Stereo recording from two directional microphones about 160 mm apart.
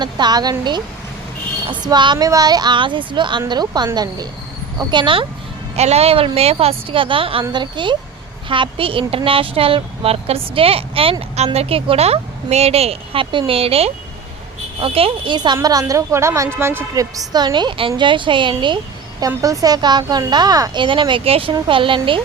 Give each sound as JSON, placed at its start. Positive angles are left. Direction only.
{"t": 0.0, "sound": "a woman's voice", "side_deg": -25}
{"t": 1.8, "sound": "a woman's voice", "side_deg": -30}
{"t": 5.7, "sound": "a woman's voice", "side_deg": -40}